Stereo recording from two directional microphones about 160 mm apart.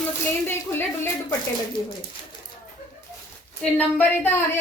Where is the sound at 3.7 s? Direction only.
10° left (ahead or behind).